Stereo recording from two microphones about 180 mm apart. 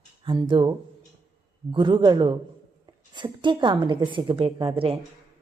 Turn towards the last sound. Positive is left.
turn(degrees=-30)  # may be behind; listen again after turning